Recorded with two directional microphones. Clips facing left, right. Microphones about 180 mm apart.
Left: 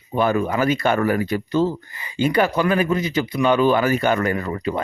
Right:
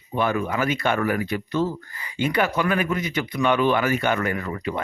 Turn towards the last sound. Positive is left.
turn(degrees=30)  # may be behind; listen again after turning